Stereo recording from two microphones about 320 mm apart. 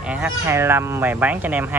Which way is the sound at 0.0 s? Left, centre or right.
Centre.